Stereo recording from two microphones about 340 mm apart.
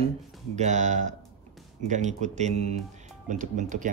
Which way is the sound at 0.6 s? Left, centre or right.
Right.